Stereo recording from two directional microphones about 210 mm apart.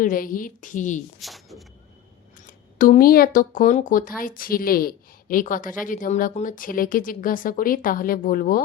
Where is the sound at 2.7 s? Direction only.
40° left (ahead or behind).